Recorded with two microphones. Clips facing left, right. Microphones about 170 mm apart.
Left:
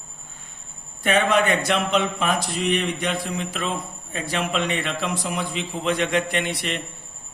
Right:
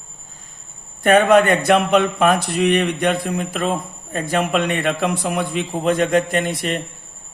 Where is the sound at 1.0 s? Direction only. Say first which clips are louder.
Right 7 dB; 50° right (ahead or behind).